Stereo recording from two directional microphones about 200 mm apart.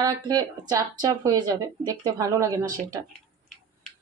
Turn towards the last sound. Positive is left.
turn(degrees=-15)  # may be behind; listen again after turning